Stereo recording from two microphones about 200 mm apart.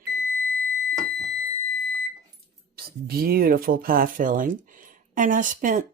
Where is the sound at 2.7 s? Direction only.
50° right (ahead or behind).